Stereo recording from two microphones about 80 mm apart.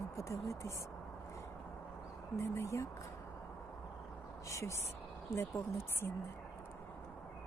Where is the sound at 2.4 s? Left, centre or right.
Left.